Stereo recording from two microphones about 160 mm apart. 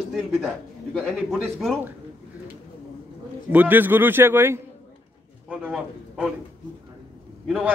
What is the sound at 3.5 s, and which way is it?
A man's voice, 10° right (ahead or behind).